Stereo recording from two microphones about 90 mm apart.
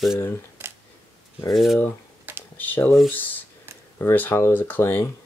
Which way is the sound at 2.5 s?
20° left (ahead or behind).